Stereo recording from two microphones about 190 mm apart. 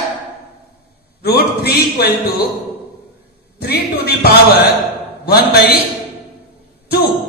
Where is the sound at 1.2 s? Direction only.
55° left (ahead or behind).